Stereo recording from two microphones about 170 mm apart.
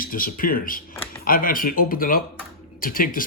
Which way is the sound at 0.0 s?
55° left (ahead or behind).